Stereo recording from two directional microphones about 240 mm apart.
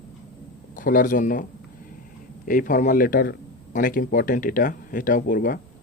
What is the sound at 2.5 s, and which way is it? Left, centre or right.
A man's voice, left.